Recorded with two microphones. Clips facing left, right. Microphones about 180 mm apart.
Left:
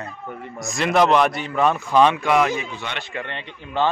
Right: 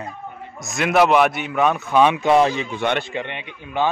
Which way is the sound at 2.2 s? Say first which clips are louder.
Right 3 dB; 30° right (ahead or behind).